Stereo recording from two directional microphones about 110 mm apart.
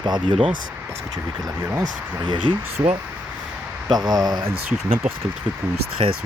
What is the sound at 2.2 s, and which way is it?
Speech, 50° right (ahead or behind).